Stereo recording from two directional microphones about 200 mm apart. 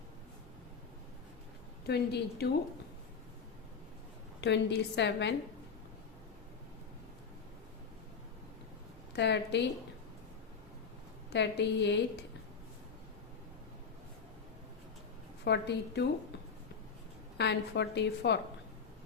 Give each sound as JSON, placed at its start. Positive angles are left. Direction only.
{"t": 1.9, "sound": "a woman's voice", "side_deg": 55}
{"t": 4.4, "sound": "a woman's voice", "side_deg": 60}
{"t": 9.1, "sound": "a woman's voice", "side_deg": 60}
{"t": 11.3, "sound": "a woman's voice", "side_deg": 60}
{"t": 15.4, "sound": "a woman's voice", "side_deg": 60}
{"t": 17.3, "sound": "a woman's voice", "side_deg": 60}